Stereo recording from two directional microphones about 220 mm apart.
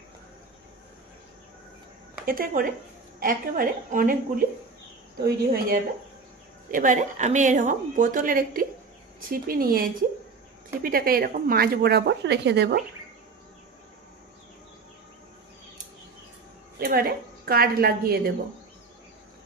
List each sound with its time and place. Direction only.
2.2 s a woman's voice: 40° right (ahead or behind)
5.2 s a woman's voice: 45° right (ahead or behind)
16.7 s a woman's voice: 45° right (ahead or behind)